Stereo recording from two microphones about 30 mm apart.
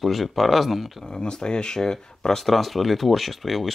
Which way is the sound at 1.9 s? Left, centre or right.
Centre.